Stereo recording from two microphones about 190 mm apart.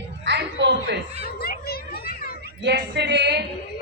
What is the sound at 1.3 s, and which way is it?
Children playing, 55° left (ahead or behind).